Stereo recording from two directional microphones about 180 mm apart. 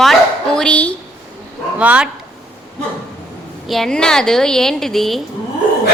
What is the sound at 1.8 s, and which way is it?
Speech, 5° right (ahead or behind).